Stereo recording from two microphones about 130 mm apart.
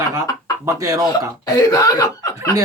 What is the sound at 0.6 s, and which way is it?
Speech, 25° right (ahead or behind).